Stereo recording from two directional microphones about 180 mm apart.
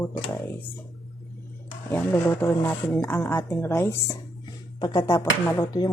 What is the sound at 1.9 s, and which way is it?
Speech, 10° left (ahead or behind).